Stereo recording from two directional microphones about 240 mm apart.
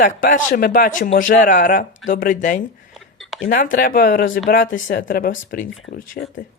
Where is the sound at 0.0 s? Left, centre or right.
Left.